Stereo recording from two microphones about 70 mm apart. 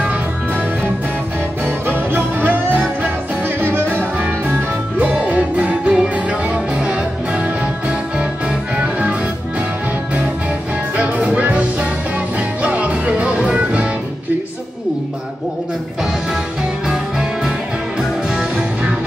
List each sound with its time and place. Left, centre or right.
1.9 s music: right
8.7 s music: centre
11.0 s music: centre
16.8 s music: centre